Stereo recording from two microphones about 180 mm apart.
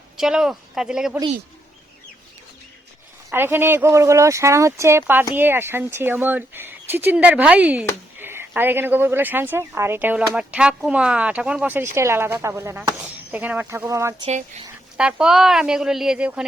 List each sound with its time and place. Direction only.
0.2 s speech: 5° right (ahead or behind)
3.3 s speech: 10° right (ahead or behind)
14.9 s speech: 5° right (ahead or behind)